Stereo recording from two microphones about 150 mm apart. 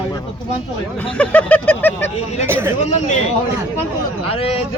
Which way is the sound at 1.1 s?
10° left (ahead or behind).